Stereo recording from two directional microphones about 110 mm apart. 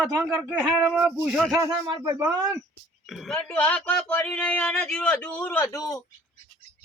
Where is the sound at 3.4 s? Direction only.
15° left (ahead or behind).